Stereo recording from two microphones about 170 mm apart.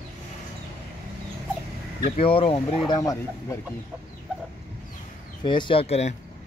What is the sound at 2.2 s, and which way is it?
Speech, 35° left (ahead or behind).